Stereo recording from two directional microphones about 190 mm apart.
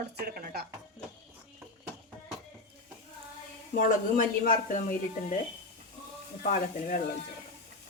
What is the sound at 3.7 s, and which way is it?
Speech, 45° left (ahead or behind).